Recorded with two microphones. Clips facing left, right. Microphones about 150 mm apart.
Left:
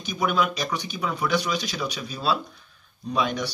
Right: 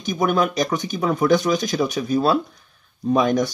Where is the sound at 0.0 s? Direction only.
45° right (ahead or behind).